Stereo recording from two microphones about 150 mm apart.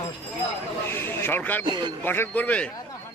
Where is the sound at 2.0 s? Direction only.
15° left (ahead or behind).